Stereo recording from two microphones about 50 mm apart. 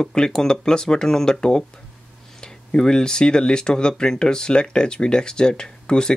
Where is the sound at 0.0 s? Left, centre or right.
Centre.